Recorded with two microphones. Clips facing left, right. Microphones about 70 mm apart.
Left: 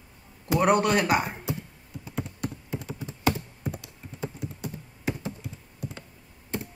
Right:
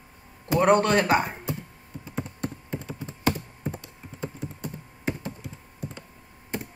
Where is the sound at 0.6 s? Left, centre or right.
Centre.